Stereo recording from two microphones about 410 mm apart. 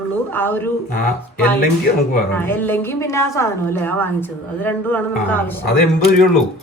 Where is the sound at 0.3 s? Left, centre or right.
Centre.